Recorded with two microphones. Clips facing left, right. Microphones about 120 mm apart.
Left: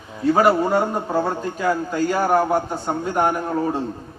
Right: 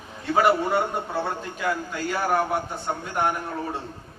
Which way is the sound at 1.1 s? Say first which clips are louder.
Left 6 dB; 40° left (ahead or behind).